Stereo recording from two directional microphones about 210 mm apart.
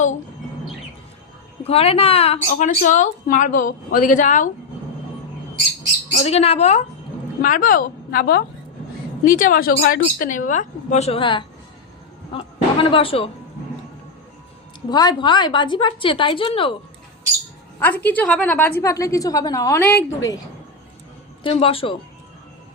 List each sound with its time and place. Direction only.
1.6 s a woman's voice: 30° left (ahead or behind)
6.1 s a woman's voice: 30° left (ahead or behind)
14.8 s a woman's voice: 20° left (ahead or behind)
17.7 s a woman's voice: 10° left (ahead or behind)
21.4 s a woman's voice: 25° left (ahead or behind)